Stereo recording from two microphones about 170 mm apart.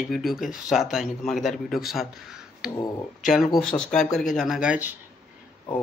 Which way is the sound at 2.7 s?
20° left (ahead or behind).